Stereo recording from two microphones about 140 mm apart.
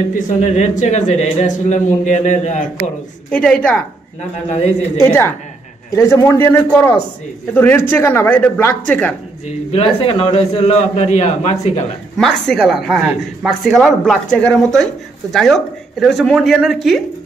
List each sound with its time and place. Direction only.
0.4 s a man's voice: 55° left (ahead or behind)
3.3 s speech: 10° left (ahead or behind)
4.2 s a man's voice: 55° left (ahead or behind)
5.0 s speech: 15° left (ahead or behind)
9.5 s a man's voice: 45° left (ahead or behind)
12.2 s a woman's voice: 5° left (ahead or behind)